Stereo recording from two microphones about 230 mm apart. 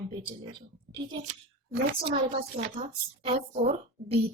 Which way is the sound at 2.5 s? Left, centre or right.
Right.